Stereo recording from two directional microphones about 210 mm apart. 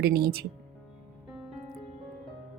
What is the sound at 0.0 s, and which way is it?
Speech, 50° right (ahead or behind).